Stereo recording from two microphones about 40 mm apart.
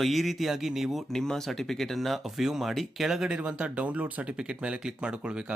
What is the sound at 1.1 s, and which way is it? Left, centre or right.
Speech, centre.